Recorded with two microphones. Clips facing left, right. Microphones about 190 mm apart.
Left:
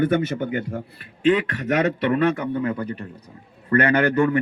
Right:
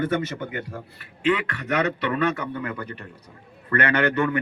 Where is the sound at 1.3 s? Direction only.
40° left (ahead or behind).